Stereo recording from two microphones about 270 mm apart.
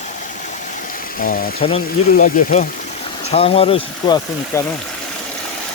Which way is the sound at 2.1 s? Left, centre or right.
Left.